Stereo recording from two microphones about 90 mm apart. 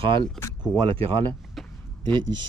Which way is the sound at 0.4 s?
5° left (ahead or behind).